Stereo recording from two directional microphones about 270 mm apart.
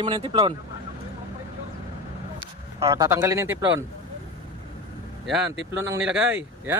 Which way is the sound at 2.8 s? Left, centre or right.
Centre.